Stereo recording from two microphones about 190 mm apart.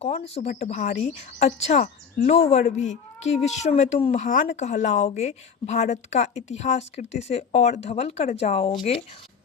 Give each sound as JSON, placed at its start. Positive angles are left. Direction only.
{"t": 0.0, "sound": "speech", "side_deg": 35}